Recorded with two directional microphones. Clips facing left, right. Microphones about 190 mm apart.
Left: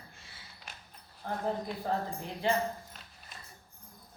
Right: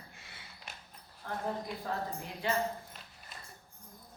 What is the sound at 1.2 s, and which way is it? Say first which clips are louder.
Speech: left 3 dB; 30° left (ahead or behind).